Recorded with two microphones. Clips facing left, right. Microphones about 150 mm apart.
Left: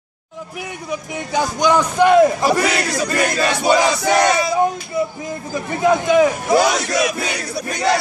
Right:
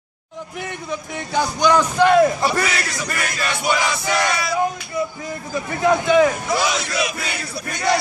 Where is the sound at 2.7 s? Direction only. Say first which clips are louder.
Left 6 dB; 55° left (ahead or behind).